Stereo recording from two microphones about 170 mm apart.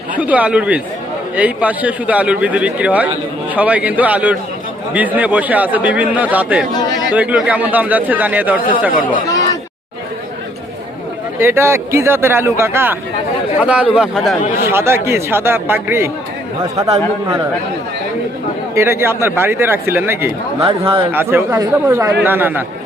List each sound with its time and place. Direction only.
0.2 s speech: 10° right (ahead or behind)
8.9 s speech: 55° left (ahead or behind)
11.3 s a man's voice: 15° right (ahead or behind)
18.7 s speech: 15° right (ahead or behind)
20.6 s a man's voice: 30° right (ahead or behind)
21.1 s speech: 10° right (ahead or behind)